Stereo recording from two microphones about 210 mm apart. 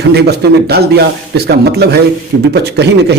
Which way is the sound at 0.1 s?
50° right (ahead or behind).